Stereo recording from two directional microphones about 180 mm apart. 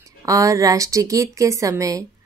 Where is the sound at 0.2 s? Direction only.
20° right (ahead or behind).